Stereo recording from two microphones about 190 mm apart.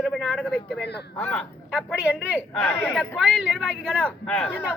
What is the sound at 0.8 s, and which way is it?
Speech, 60° left (ahead or behind).